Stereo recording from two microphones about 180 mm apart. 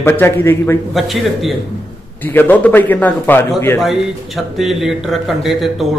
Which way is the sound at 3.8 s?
Centre (ahead or behind).